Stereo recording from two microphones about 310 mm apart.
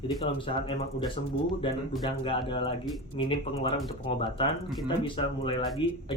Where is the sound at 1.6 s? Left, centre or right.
Centre.